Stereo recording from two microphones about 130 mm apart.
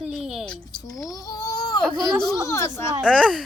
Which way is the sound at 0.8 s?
25° left (ahead or behind).